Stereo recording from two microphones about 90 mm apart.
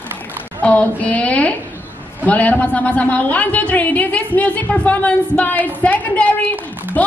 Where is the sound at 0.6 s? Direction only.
15° left (ahead or behind).